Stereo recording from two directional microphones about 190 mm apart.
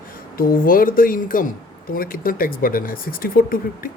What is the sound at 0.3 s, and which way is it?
Speech, 50° left (ahead or behind).